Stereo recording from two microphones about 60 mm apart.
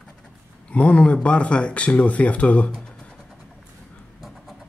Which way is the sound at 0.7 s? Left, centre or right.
Left.